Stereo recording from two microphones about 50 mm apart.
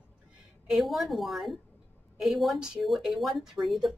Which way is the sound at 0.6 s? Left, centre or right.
Centre.